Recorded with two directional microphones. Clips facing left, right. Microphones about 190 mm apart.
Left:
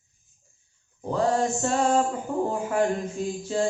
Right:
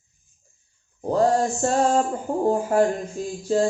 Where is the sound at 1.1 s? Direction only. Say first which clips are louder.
Right 4 dB; 40° right (ahead or behind).